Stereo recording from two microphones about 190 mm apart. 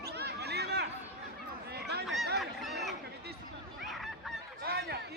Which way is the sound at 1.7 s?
60° right (ahead or behind).